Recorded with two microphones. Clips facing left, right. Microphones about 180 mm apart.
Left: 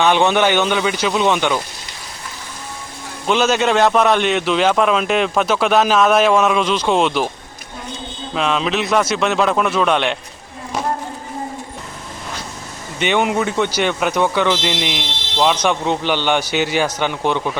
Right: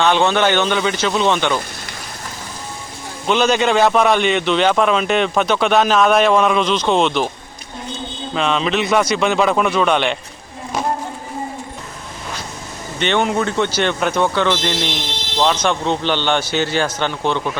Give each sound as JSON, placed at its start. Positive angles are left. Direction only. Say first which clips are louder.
{"t": 0.0, "sound": "speech", "louder": "left 1 dB", "side_deg": 15}
{"t": 3.2, "sound": "a man's voice", "louder": "even", "side_deg": 0}
{"t": 8.3, "sound": "a man's voice", "louder": "even", "side_deg": 5}
{"t": 13.0, "sound": "speech", "louder": "even", "side_deg": 10}